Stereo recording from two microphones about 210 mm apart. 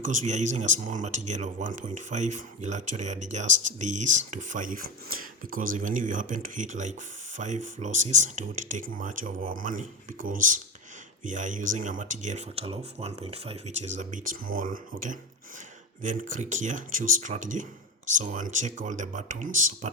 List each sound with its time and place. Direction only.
0.0 s speech: 35° right (ahead or behind)